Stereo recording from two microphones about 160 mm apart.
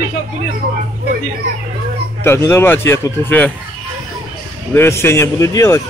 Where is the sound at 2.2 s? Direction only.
15° left (ahead or behind).